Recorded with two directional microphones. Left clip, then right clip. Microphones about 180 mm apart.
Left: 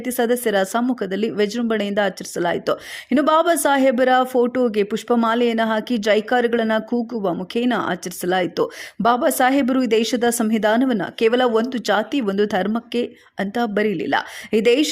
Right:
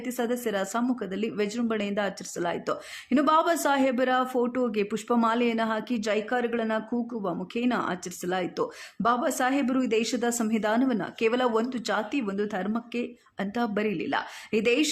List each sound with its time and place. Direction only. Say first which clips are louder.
0.0 s speech: left 9 dB; 35° left (ahead or behind)